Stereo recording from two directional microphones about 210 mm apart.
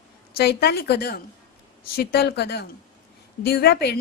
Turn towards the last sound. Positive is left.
turn(degrees=50)  # may be behind; listen again after turning